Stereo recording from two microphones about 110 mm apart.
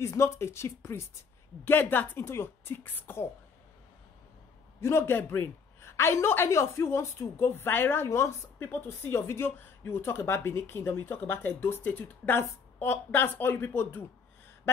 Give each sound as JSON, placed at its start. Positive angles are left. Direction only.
{"t": 0.0, "sound": "a woman's voice", "side_deg": 25}
{"t": 4.7, "sound": "a woman's voice", "side_deg": 20}